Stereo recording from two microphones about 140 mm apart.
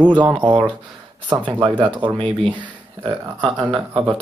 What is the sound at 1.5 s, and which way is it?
Speech, 35° right (ahead or behind).